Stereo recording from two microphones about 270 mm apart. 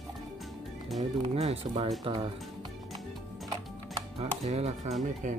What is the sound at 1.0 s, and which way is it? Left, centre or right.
Speech, centre.